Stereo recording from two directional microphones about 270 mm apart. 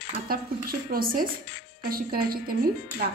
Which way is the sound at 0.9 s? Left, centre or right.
Right.